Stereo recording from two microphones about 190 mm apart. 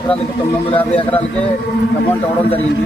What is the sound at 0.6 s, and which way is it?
Speech, 25° left (ahead or behind).